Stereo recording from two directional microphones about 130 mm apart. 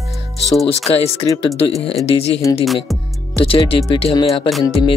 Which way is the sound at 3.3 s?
45° left (ahead or behind).